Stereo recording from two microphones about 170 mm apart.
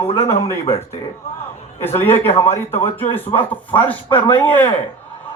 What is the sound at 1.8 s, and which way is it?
A man's voice, 15° left (ahead or behind).